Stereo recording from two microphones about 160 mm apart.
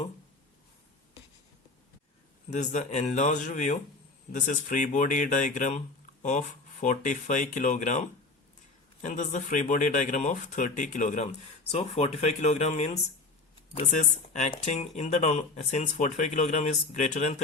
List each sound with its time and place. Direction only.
2.5 s speech: 50° left (ahead or behind)
11.7 s speech: 40° left (ahead or behind)
14.0 s speech: 50° left (ahead or behind)